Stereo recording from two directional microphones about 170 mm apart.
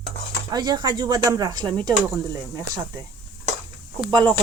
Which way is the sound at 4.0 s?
25° right (ahead or behind).